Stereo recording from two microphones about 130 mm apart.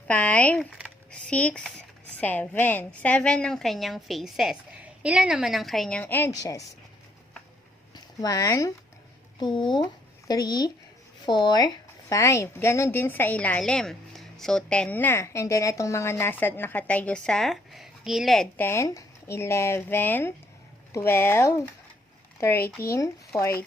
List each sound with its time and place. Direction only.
0.1 s a woman's voice: 10° left (ahead or behind)
6.0 s speech: 15° left (ahead or behind)
6.4 s speech: 25° left (ahead or behind)
7.9 s speech: 30° left (ahead or behind)
9.4 s speech: 35° left (ahead or behind); by 18.4 s centre (ahead or behind)
18.5 s speech: 20° left (ahead or behind)
22.8 s speech: 20° left (ahead or behind)